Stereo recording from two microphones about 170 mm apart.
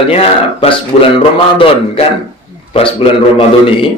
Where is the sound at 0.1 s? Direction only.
35° left (ahead or behind).